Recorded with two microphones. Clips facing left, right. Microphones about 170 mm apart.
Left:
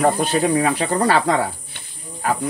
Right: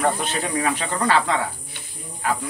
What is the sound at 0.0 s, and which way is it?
Speech, 35° left (ahead or behind).